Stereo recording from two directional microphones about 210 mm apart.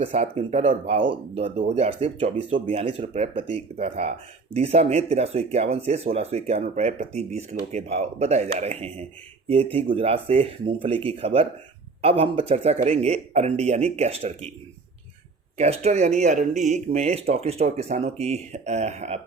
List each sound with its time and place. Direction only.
0.0 s speech: 30° right (ahead or behind)
15.5 s speech: 30° right (ahead or behind)